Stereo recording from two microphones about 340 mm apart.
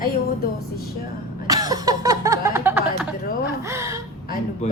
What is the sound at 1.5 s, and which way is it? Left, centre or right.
Music, centre.